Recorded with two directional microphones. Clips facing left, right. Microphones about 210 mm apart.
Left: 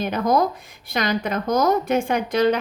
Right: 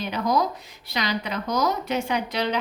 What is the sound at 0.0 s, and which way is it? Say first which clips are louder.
A woman's voice: left 4 dB; 50° left (ahead or behind).